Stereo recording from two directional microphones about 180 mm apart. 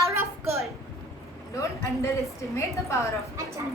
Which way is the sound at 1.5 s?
15° left (ahead or behind).